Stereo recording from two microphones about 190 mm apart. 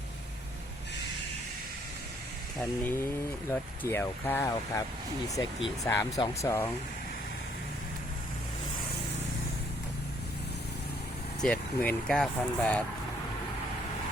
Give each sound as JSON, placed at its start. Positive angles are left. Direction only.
{"t": 2.6, "sound": "speech", "side_deg": 10}
{"t": 11.4, "sound": "speech", "side_deg": 5}